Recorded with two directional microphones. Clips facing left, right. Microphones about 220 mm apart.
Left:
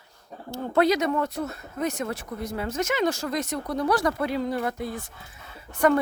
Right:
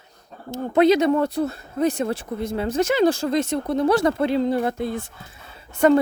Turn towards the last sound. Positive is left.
turn(degrees=-25)  # may be behind; listen again after turning